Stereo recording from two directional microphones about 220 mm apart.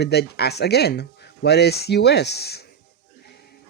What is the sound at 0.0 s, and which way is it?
Speech, 50° left (ahead or behind).